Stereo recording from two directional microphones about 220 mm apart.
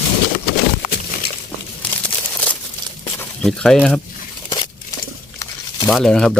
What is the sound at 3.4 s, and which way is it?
Speech, 5° left (ahead or behind).